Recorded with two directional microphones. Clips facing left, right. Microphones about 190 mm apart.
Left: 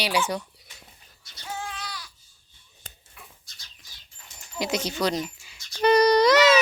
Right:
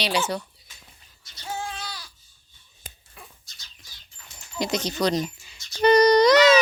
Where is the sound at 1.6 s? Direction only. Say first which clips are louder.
Right 2 dB; 30° right (ahead or behind).